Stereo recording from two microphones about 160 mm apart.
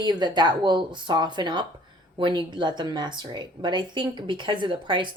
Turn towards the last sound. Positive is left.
turn(degrees=-30)  # may be behind; listen again after turning